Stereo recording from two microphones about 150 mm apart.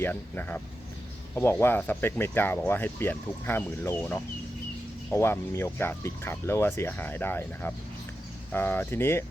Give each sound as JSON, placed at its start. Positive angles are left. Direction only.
{"t": 0.0, "sound": "speech", "side_deg": 10}